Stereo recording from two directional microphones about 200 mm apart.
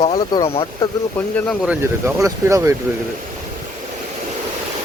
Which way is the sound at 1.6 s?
15° right (ahead or behind).